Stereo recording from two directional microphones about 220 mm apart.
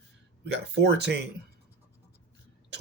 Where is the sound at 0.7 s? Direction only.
50° right (ahead or behind).